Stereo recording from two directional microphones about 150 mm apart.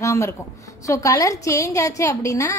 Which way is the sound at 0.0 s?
20° left (ahead or behind).